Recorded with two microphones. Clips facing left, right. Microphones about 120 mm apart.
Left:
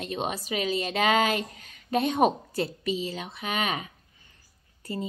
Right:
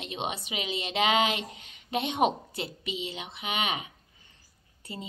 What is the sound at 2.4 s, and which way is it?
A woman's voice, 25° right (ahead or behind).